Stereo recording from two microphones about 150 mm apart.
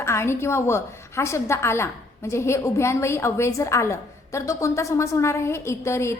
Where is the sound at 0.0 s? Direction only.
15° left (ahead or behind).